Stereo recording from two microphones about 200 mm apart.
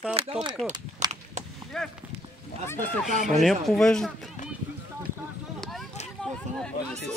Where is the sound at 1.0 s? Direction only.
20° right (ahead or behind).